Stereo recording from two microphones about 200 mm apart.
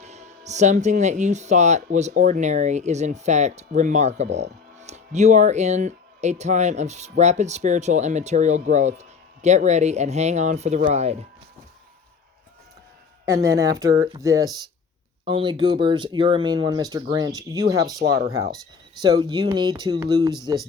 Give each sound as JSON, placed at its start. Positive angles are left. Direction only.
{"t": 0.0, "sound": "speech", "side_deg": -35}
{"t": 13.2, "sound": "speech", "side_deg": -15}
{"t": 19.0, "sound": "speech", "side_deg": -20}